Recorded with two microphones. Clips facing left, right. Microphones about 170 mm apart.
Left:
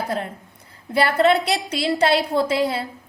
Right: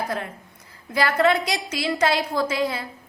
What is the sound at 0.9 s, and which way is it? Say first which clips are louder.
A woman's voice: left 3 dB; 30° left (ahead or behind).